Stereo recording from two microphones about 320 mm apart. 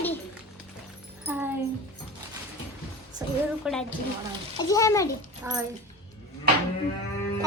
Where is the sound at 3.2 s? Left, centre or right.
Centre.